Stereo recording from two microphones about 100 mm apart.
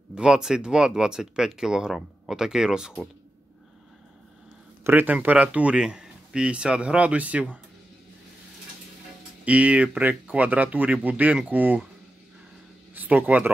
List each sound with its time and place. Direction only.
0.1 s speech: 10° right (ahead or behind)
4.8 s speech: 20° right (ahead or behind)
9.4 s speech: 15° right (ahead or behind)
12.9 s speech: 20° right (ahead or behind)